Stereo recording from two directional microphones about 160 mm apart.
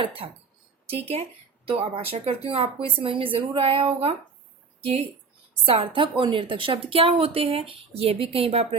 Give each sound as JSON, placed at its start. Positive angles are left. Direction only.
{"t": 0.0, "sound": "speech", "side_deg": -35}
{"t": 5.6, "sound": "speech", "side_deg": -35}